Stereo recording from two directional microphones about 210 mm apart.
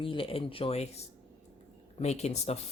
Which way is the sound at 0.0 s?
25° left (ahead or behind).